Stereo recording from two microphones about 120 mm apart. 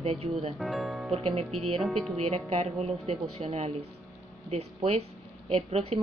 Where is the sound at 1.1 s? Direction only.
55° right (ahead or behind).